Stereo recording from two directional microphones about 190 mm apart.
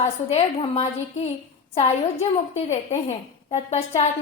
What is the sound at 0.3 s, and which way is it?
Speech, 30° left (ahead or behind).